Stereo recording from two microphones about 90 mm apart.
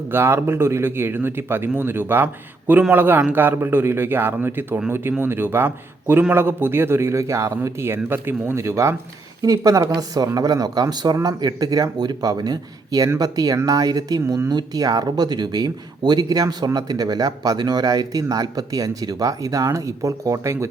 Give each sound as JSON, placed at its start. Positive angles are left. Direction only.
{"t": 0.1, "sound": "a man's voice", "side_deg": -25}